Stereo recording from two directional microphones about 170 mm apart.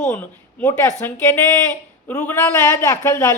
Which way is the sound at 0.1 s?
15° left (ahead or behind).